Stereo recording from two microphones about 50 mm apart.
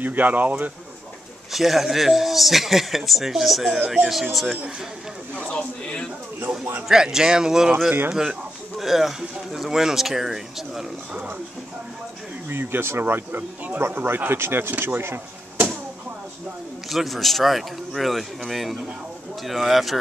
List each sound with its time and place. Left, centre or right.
0.0 s speech: right
1.5 s speech: centre
6.9 s speech: centre
12.4 s speech: right
16.9 s speech: centre